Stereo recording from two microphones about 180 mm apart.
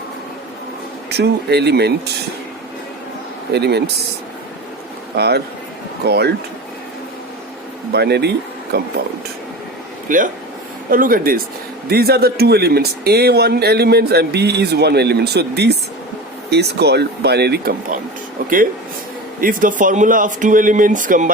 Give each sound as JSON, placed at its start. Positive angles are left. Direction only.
{"t": 1.1, "sound": "speech", "side_deg": -65}
{"t": 3.5, "sound": "speech", "side_deg": -65}
{"t": 5.1, "sound": "speech", "side_deg": -65}
{"t": 7.9, "sound": "speech", "side_deg": -65}
{"t": 10.1, "sound": "speech", "side_deg": -45}
{"t": 19.4, "sound": "speech", "side_deg": -50}